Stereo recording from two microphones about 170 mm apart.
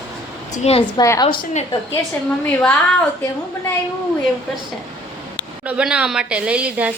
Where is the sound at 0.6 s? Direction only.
40° left (ahead or behind).